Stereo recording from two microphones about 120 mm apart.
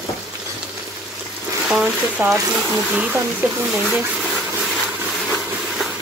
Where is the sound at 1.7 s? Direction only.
10° right (ahead or behind).